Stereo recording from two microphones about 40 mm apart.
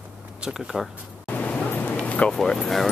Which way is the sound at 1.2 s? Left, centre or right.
Left.